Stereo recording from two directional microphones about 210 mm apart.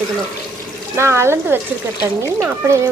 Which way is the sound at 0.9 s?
15° right (ahead or behind).